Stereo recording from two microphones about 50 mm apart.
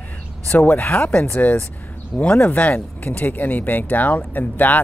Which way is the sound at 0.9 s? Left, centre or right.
Left.